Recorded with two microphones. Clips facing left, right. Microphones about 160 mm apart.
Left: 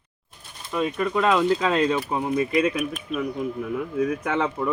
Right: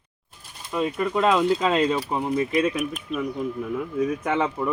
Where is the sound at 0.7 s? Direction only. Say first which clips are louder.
Even; centre (ahead or behind).